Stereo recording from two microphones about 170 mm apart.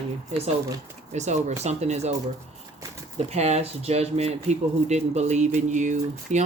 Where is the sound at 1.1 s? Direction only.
45° right (ahead or behind).